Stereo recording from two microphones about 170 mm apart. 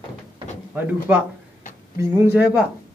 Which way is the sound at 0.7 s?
10° right (ahead or behind).